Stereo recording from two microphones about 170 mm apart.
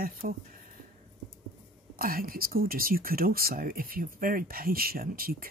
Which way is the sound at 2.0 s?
60° right (ahead or behind).